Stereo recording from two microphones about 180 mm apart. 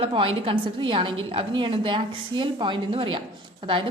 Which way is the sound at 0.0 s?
30° right (ahead or behind).